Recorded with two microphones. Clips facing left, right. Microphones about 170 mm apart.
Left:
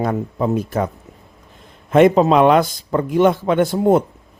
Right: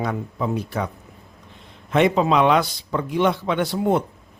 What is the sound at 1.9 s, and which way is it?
Speech, 45° left (ahead or behind).